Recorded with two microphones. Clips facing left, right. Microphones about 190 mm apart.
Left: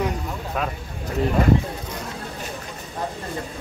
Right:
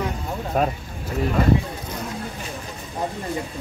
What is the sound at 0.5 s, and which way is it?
Speech, 45° right (ahead or behind).